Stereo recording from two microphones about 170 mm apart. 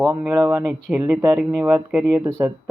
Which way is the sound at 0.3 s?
20° right (ahead or behind).